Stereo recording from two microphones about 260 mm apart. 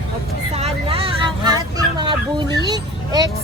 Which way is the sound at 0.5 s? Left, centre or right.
Right.